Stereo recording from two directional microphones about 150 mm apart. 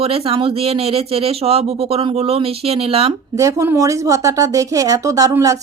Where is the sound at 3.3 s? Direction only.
20° right (ahead or behind).